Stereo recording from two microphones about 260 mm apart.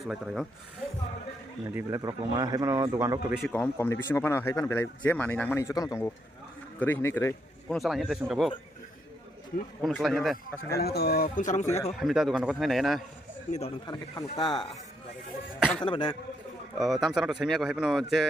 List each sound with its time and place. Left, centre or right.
0.0 s a man's voice: centre
1.7 s speech: centre
3.3 s a man's voice: centre
9.8 s a man's voice: centre
10.8 s speech: left
11.9 s a man's voice: centre
13.5 s speech: centre
15.8 s a man's voice: centre
16.7 s a man's voice: centre